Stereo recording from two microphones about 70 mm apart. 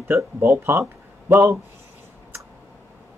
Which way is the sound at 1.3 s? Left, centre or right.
Right.